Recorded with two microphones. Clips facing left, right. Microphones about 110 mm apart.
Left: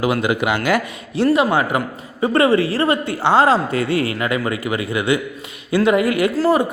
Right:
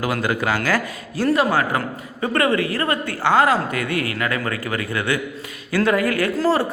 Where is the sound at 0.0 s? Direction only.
15° left (ahead or behind).